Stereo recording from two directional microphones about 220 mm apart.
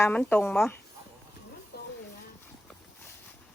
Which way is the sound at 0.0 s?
5° left (ahead or behind).